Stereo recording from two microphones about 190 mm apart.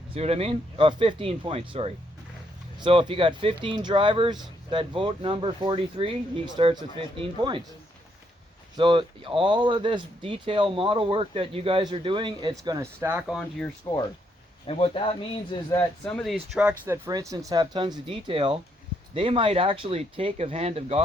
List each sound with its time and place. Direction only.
0.1 s speech: 30° right (ahead or behind)
8.7 s speech: 25° right (ahead or behind); by 13.7 s centre (ahead or behind)
13.9 s speech: 15° left (ahead or behind)
14.7 s speech: 30° left (ahead or behind)
16.0 s speech: centre (ahead or behind)
17.1 s speech: 20° right (ahead or behind)